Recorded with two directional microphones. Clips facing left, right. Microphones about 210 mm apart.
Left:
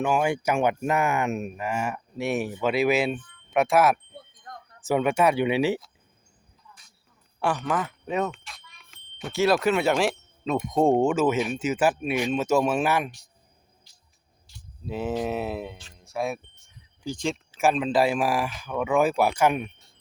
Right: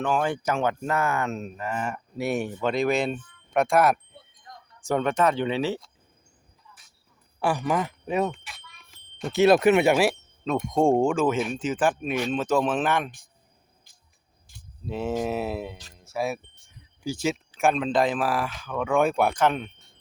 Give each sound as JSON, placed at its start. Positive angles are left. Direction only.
{"t": 0.0, "sound": "speech", "side_deg": 10}
{"t": 4.5, "sound": "a sound", "side_deg": 50}
{"t": 4.8, "sound": "speech", "side_deg": 5}
{"t": 6.7, "sound": "cricket", "side_deg": 50}
{"t": 7.3, "sound": "speech", "side_deg": -10}
{"t": 9.3, "sound": "speech", "side_deg": -20}
{"t": 9.9, "sound": "speech", "side_deg": -5}
{"t": 14.5, "sound": "a sound", "side_deg": -50}
{"t": 14.8, "sound": "speech", "side_deg": 0}